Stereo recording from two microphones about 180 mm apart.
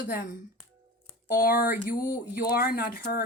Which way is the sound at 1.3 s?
55° left (ahead or behind).